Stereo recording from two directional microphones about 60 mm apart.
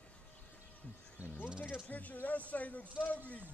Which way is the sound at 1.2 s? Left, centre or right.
Left.